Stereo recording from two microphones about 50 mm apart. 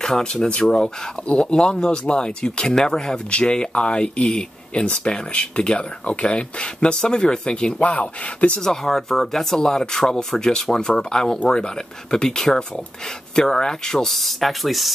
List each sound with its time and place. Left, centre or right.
0.0 s speech: centre
7.8 s speech: left
8.5 s speech: centre